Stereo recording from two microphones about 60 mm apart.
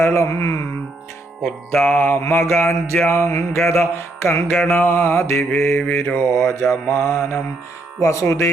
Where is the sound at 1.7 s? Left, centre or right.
Left.